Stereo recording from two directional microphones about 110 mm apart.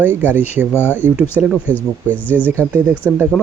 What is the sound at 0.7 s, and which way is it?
Speech, 20° left (ahead or behind).